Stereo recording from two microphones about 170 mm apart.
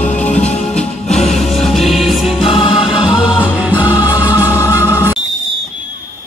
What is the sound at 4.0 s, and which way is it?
Music, 10° right (ahead or behind).